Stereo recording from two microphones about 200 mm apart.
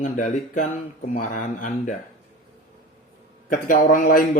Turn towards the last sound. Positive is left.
turn(degrees=45)  # may be behind; listen again after turning